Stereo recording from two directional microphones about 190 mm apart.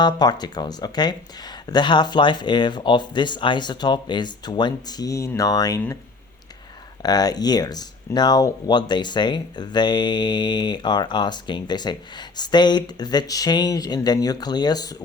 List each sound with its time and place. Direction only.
0.0 s speech: 20° left (ahead or behind)
7.0 s speech: 20° left (ahead or behind)